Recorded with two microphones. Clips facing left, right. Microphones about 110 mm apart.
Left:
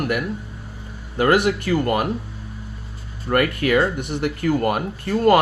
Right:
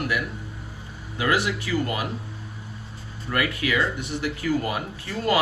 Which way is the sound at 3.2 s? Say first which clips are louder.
Left 6 dB; 50° left (ahead or behind).